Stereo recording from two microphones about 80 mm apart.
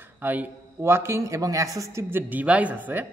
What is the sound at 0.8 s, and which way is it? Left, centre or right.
A man's voice, right.